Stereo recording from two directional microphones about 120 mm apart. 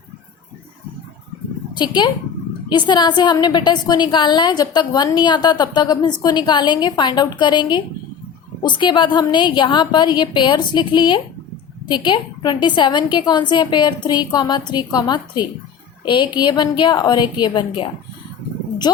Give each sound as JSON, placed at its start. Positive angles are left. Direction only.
{"t": 1.7, "sound": "a woman's voice", "side_deg": 40}